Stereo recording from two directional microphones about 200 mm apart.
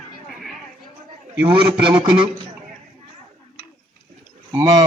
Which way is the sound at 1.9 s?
25° right (ahead or behind).